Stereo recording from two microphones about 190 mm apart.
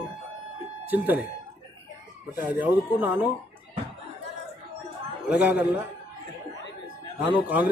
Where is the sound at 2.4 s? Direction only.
10° right (ahead or behind).